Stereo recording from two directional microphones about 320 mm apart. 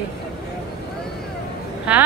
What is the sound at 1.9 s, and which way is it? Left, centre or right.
Speech, centre.